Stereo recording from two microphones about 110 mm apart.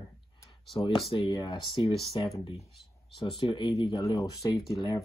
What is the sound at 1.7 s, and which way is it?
Speech, 50° left (ahead or behind).